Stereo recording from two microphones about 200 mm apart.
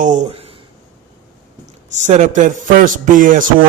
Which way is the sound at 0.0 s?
40° right (ahead or behind).